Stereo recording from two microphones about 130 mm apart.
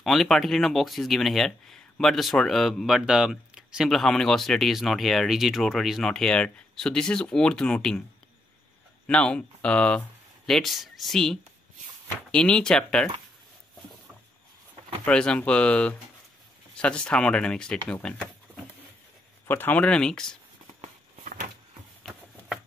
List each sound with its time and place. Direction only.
0.0 s speech: centre (ahead or behind)
9.0 s speech: 10° left (ahead or behind)
15.0 s speech: 5° left (ahead or behind)
19.4 s speech: 15° left (ahead or behind)
20.8 s a sound: 75° right (ahead or behind)